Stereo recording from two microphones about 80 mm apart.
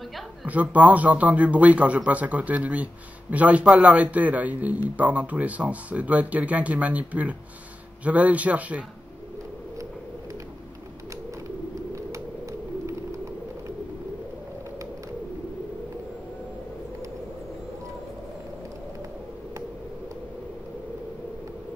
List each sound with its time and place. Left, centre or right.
0.5 s a man's voice: centre